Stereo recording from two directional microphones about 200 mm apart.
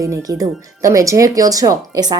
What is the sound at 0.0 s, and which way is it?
Speech, 15° right (ahead or behind).